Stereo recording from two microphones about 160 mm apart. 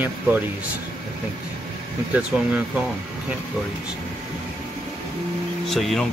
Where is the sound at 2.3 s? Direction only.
5° right (ahead or behind).